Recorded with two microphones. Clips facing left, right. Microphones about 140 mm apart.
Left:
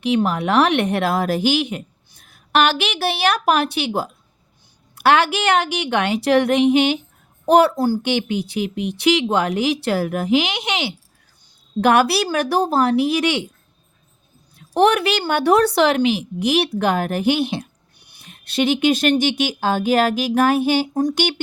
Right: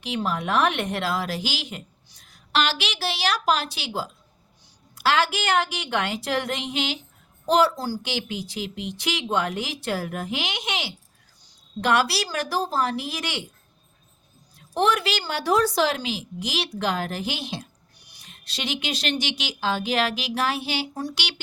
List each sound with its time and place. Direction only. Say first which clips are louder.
0.0 s a woman's voice: left 8 dB; 65° left (ahead or behind)
11.8 s a woman's voice: left 7 dB; 55° left (ahead or behind)
14.5 s a woman's voice: left 7 dB; 70° left (ahead or behind); by 21.4 s 50° left (ahead or behind)